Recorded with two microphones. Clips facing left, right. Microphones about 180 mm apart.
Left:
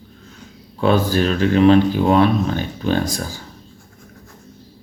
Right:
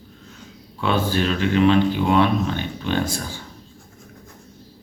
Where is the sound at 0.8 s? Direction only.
40° left (ahead or behind).